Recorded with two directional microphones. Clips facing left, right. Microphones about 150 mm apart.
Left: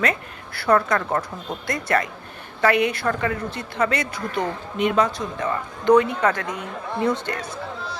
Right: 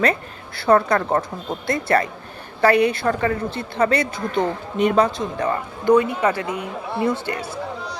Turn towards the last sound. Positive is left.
turn(degrees=-5)  # may be behind; listen again after turning